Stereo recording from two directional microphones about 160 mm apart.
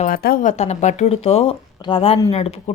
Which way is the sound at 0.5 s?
45° left (ahead or behind).